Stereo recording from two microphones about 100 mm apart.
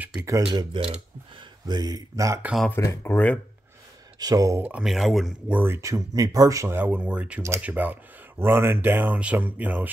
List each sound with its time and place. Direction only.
0.5 s speech: 55° right (ahead or behind); by 2.4 s 30° right (ahead or behind)
2.7 s speech: 25° left (ahead or behind)
4.2 s speech: 35° right (ahead or behind)
4.6 s speech: 15° right (ahead or behind)
4.8 s speech: centre (ahead or behind)
5.5 s speech: 20° right (ahead or behind)
5.8 s speech: 35° right (ahead or behind)
6.8 s speech: 15° right (ahead or behind)